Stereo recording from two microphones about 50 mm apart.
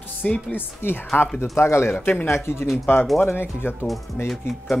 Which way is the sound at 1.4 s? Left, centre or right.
Left.